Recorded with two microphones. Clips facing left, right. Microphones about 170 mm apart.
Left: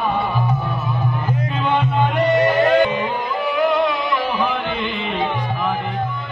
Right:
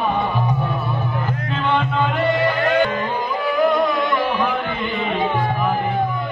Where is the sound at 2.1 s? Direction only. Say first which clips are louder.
Left 5 dB; 20° left (ahead or behind).